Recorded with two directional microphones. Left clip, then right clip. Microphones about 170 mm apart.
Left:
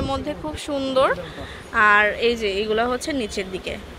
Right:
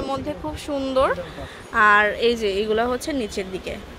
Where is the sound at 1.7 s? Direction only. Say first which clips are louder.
Even; 15° right (ahead or behind).